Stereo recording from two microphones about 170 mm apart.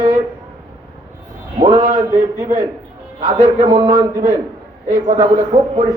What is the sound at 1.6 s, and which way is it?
Speech, 25° right (ahead or behind).